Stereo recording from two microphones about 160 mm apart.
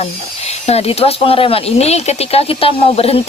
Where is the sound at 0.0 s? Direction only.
40° left (ahead or behind).